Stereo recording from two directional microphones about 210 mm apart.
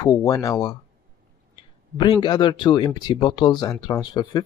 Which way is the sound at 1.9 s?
20° left (ahead or behind).